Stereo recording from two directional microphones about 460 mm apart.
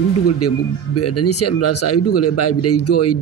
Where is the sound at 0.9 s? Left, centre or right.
Left.